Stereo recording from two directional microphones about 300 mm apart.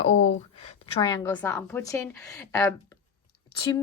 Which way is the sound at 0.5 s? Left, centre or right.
Centre.